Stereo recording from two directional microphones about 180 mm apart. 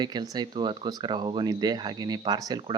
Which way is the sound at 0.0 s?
25° right (ahead or behind).